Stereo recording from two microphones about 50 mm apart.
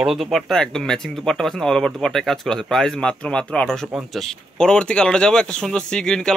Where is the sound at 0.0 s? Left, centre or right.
Centre.